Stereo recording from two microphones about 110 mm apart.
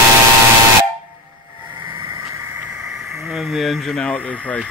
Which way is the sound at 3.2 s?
5° right (ahead or behind).